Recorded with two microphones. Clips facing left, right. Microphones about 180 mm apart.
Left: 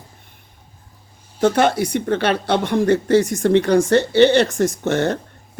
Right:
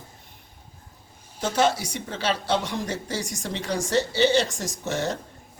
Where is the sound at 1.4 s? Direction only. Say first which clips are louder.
Left 7 dB; 60° left (ahead or behind).